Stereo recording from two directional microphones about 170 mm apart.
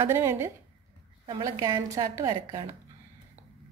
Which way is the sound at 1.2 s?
25° right (ahead or behind).